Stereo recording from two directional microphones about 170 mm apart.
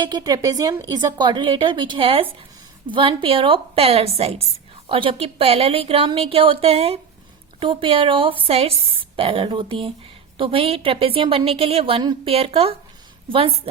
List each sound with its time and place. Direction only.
0.0 s a woman's voice: 25° right (ahead or behind)